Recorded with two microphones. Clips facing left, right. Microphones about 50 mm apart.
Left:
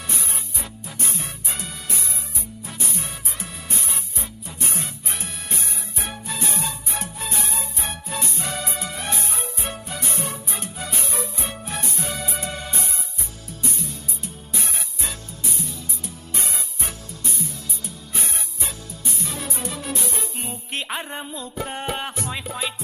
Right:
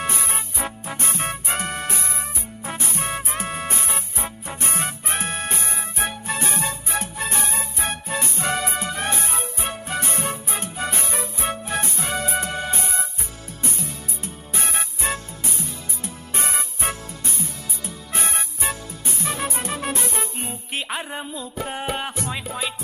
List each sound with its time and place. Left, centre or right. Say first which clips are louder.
0.0 s music: right 6 dB; right
20.5 s music: even; centre